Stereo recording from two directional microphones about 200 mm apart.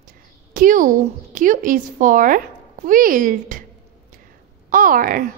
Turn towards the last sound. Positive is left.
turn(degrees=-45)  # may be behind; listen again after turning